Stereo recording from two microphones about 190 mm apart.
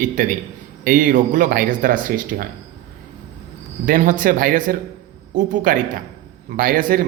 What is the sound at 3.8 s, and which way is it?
Speech, 45° right (ahead or behind).